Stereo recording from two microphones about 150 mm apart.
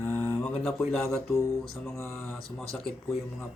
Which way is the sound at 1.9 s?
15° left (ahead or behind).